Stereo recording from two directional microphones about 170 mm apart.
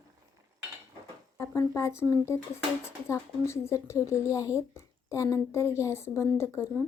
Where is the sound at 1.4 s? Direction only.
20° left (ahead or behind).